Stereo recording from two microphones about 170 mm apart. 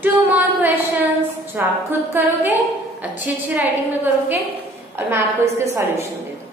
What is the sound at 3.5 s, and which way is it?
A woman's voice, 10° right (ahead or behind).